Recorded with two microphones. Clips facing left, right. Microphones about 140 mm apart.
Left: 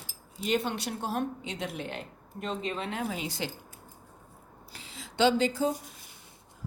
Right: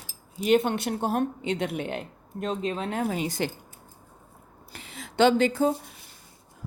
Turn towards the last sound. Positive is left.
turn(degrees=-55)  # may be behind; listen again after turning